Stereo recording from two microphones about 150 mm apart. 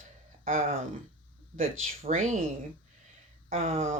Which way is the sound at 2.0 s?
55° right (ahead or behind).